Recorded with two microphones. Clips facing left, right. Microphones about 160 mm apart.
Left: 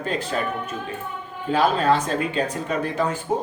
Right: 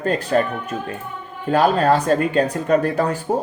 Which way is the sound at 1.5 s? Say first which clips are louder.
Right 3 dB; 45° right (ahead or behind).